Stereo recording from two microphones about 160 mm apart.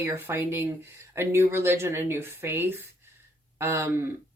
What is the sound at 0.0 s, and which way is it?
Speech, 15° right (ahead or behind).